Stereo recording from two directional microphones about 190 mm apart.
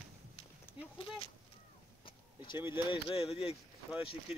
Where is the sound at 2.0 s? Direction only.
25° left (ahead or behind).